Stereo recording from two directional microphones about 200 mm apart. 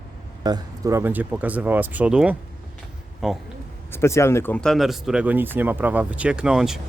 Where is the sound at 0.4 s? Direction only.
20° right (ahead or behind); by 3.4 s centre (ahead or behind).